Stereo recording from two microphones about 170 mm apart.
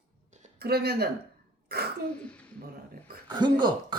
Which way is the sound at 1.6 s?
65° right (ahead or behind).